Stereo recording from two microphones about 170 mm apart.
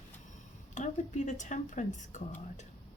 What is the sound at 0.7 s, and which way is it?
Speech, 45° left (ahead or behind).